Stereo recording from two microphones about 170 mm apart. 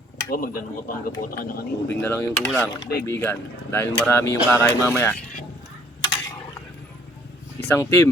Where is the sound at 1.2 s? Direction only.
60° left (ahead or behind).